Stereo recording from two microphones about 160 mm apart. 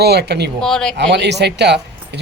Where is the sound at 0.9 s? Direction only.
90° right.